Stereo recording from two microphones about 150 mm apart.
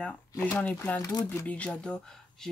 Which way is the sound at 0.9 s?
20° left (ahead or behind).